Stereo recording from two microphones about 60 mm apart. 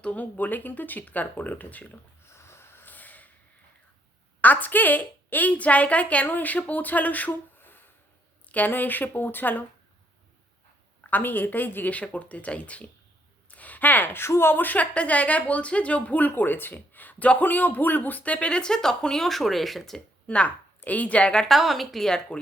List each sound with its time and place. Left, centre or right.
0.0 s a woman's voice: left
2.3 s snoring: left
2.8 s snort: left
4.4 s a woman's voice: left
11.0 s a woman's voice: left; by 20.0 s centre
20.2 s a woman's voice: left
21.5 s a woman's voice: centre